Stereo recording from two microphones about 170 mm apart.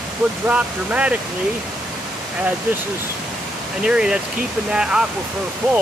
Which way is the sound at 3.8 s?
5° right (ahead or behind).